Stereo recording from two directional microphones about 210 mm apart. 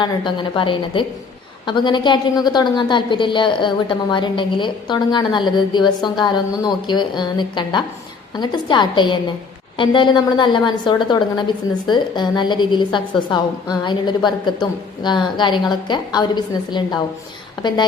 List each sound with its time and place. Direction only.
0.0 s a woman's voice: 20° left (ahead or behind)